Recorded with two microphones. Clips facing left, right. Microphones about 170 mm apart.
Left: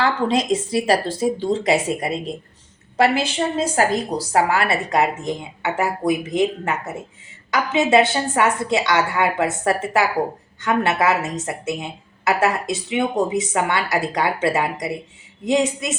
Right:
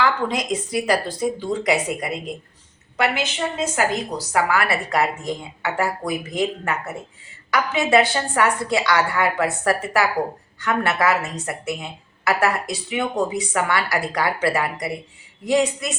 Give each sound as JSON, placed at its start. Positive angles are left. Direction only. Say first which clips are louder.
{"t": 0.0, "sound": "a woman's voice", "louder": "left 2 dB", "side_deg": 25}